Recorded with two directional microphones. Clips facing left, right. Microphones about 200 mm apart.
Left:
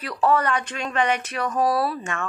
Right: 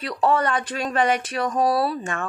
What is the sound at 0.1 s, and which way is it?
Speech, 30° right (ahead or behind).